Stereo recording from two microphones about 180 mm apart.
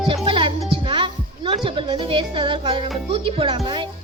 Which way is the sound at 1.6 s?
30° right (ahead or behind).